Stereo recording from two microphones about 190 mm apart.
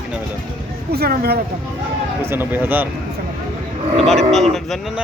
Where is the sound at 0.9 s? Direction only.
55° right (ahead or behind).